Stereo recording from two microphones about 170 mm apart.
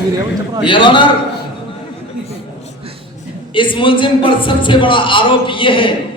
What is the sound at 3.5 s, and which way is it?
A man's voice, 30° left (ahead or behind).